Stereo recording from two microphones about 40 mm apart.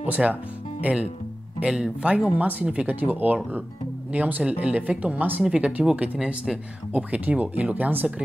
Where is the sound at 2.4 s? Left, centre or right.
Right.